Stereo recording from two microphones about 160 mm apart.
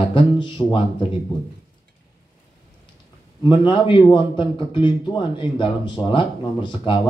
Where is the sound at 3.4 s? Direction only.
30° left (ahead or behind).